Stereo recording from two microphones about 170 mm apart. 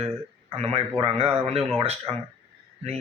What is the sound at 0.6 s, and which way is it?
A man's voice, 35° right (ahead or behind).